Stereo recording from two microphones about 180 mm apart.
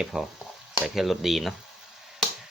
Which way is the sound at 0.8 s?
Centre (ahead or behind).